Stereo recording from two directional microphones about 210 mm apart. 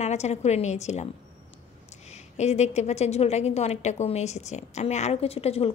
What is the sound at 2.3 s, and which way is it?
A woman's voice, 30° left (ahead or behind).